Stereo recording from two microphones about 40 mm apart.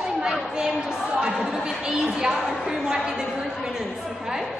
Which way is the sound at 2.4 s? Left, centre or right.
Centre.